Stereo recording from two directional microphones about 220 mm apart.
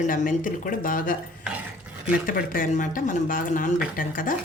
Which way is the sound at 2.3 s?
40° left (ahead or behind).